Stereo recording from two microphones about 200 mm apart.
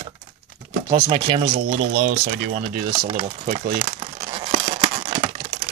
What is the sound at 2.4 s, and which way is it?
Speech, 55° right (ahead or behind).